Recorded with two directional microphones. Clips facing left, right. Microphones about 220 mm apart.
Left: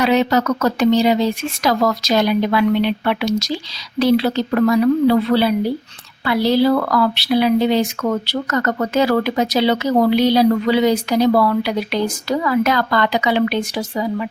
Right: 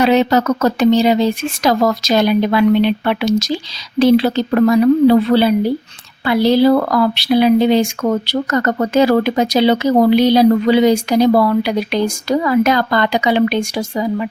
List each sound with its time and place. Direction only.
0.0 s speech: 25° right (ahead or behind)
8.5 s speech: 30° right (ahead or behind)
9.4 s speech: 20° right (ahead or behind)